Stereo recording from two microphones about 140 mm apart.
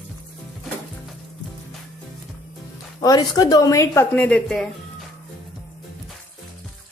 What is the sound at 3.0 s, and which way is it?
A woman's voice, 25° left (ahead or behind).